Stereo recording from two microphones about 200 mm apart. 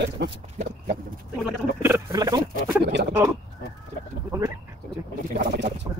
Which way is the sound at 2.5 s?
60° right (ahead or behind).